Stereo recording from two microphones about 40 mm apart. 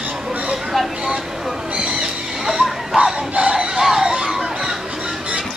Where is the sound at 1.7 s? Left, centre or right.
Right.